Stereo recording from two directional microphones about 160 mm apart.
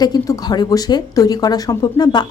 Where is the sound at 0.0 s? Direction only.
25° left (ahead or behind).